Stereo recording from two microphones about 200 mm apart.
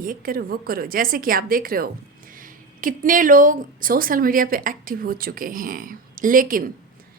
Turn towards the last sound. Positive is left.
turn(degrees=-45)  # may be behind; listen again after turning